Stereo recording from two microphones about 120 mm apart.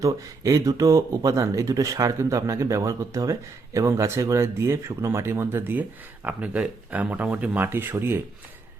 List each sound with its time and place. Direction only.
0.0 s speech: 25° right (ahead or behind)